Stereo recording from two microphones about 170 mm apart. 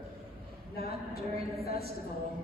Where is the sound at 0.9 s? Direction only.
35° right (ahead or behind).